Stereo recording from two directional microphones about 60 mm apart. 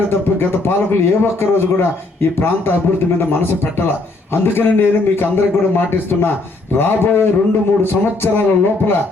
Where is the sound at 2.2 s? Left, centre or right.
Left.